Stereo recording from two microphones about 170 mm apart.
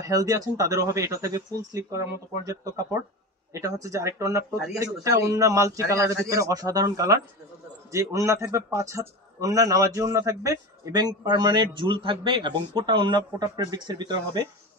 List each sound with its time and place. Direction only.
0.0 s a man's voice: 20° right (ahead or behind)